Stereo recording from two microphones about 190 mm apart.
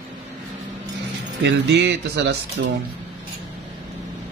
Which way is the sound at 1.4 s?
65° right (ahead or behind).